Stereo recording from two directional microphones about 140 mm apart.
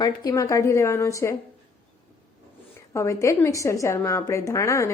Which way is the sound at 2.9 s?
20° left (ahead or behind).